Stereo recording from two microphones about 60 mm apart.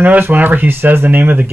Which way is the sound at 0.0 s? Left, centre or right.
Right.